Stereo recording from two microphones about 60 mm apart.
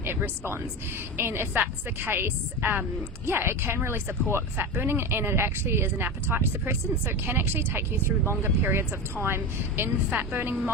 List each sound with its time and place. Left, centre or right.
0.0 s speech: right